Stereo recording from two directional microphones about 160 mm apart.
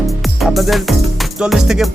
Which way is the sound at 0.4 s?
Centre (ahead or behind).